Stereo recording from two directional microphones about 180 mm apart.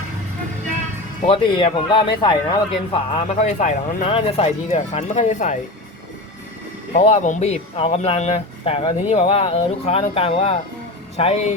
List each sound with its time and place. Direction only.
1.3 s a man's voice: 30° left (ahead or behind)
3.6 s speech: 35° left (ahead or behind)
6.9 s speech: 40° left (ahead or behind)